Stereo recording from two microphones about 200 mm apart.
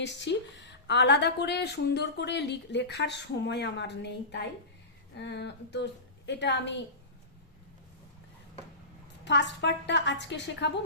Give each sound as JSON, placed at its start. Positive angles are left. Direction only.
{"t": 0.0, "sound": "a woman's voice", "side_deg": 60}
{"t": 9.2, "sound": "a woman's voice", "side_deg": 60}